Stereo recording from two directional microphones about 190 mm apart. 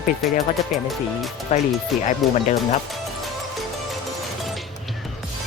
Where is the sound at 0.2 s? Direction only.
Centre (ahead or behind).